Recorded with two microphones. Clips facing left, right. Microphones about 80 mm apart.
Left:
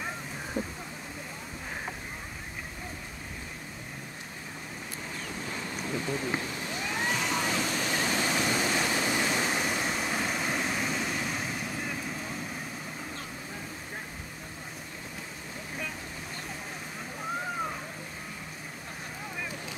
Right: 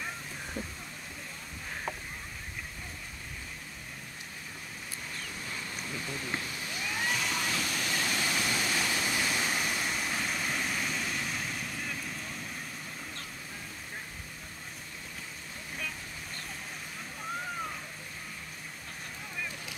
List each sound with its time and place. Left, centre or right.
0.6 s speech: centre
5.5 s a sound: left
6.8 s emergency vehicle: centre
7.8 s waterfall: centre
11.1 s vehicle: centre